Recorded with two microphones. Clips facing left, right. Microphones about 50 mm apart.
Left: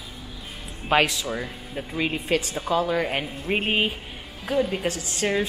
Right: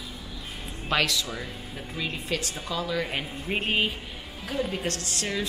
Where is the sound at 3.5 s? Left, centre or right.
Centre.